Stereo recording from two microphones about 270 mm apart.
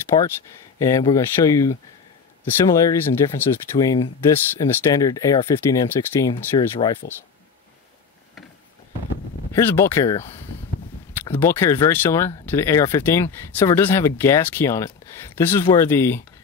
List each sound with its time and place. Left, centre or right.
0.1 s speech: centre
9.5 s speech: centre
11.1 s speech: centre